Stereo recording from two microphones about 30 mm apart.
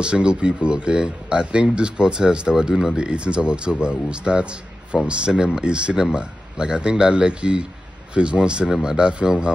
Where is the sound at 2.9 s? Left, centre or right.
Right.